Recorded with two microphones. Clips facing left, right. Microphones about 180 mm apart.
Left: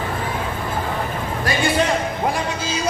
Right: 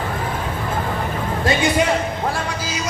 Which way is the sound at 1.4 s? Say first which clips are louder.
Right 3 dB; 25° right (ahead or behind).